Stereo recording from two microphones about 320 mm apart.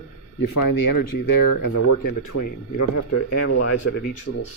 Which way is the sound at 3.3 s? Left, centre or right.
Left.